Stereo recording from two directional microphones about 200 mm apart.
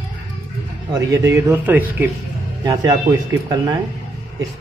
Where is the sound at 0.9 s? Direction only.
15° right (ahead or behind).